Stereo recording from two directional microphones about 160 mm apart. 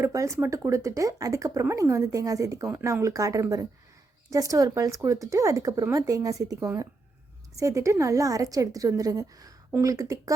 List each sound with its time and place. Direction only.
0.0 s speech: 20° right (ahead or behind)